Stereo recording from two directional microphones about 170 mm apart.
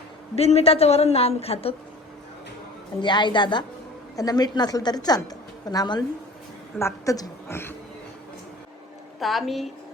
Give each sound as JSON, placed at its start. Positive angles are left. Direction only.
{"t": 0.3, "sound": "a woman's voice", "side_deg": 40}
{"t": 3.0, "sound": "a woman's voice", "side_deg": 25}
{"t": 9.2, "sound": "a woman's voice", "side_deg": 0}